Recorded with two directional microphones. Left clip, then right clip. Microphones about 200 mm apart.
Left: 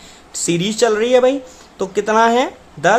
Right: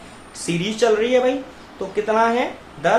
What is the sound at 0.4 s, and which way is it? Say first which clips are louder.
Speech: left 3 dB; 40° left (ahead or behind).